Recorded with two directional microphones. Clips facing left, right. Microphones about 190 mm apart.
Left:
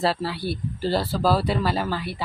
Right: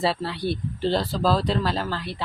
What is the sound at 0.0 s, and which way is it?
Speech, centre (ahead or behind).